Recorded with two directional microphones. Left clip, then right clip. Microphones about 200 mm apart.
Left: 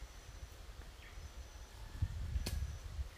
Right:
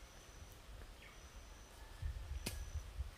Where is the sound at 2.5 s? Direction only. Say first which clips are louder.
Left 1 dB; 10° right (ahead or behind).